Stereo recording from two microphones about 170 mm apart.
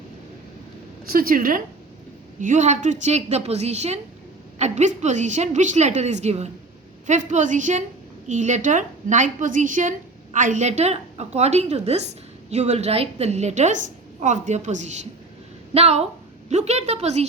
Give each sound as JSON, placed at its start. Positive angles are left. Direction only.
{"t": 1.1, "sound": "a woman's voice", "side_deg": -60}